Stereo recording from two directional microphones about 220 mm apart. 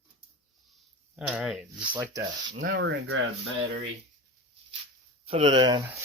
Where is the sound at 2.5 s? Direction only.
40° right (ahead or behind).